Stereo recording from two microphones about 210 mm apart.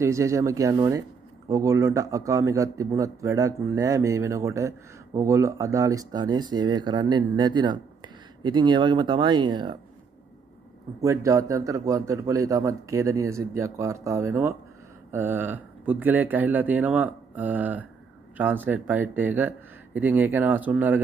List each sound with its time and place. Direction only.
0.0 s speech: 15° right (ahead or behind)
11.0 s speech: 15° right (ahead or behind)